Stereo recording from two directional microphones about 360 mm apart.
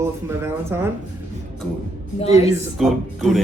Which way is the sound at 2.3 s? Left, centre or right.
Centre.